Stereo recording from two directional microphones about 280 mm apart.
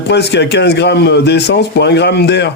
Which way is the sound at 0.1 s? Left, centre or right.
Left.